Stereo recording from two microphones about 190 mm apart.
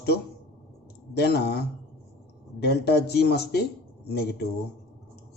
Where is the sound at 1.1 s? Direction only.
60° left (ahead or behind).